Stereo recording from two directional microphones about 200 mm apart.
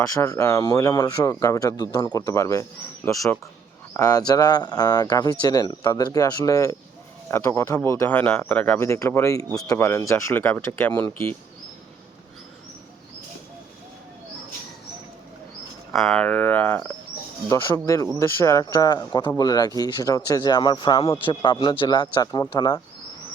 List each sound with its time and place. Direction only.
0.1 s speech: 15° left (ahead or behind)
15.9 s speech: centre (ahead or behind)
17.8 s speech: 15° left (ahead or behind)